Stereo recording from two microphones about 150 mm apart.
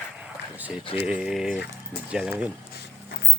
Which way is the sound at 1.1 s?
5° right (ahead or behind).